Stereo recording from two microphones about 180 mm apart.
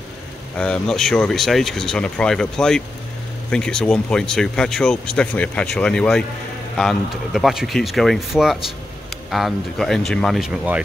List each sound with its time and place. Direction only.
0.6 s speech: 5° left (ahead or behind)